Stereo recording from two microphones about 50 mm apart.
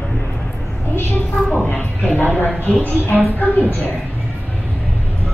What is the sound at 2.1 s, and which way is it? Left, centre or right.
A woman's voice, left.